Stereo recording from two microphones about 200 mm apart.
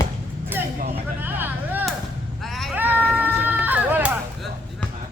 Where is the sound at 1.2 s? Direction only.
10° right (ahead or behind).